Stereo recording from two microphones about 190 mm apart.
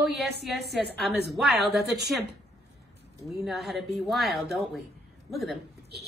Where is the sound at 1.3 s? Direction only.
Centre (ahead or behind).